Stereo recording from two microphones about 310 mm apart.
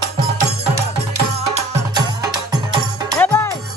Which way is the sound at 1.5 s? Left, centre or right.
Centre.